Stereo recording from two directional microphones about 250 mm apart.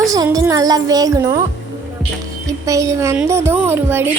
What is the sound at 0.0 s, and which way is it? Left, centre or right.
A woman's voice, centre.